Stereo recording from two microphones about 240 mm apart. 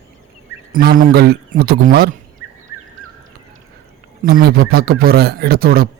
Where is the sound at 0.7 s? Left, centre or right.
Right.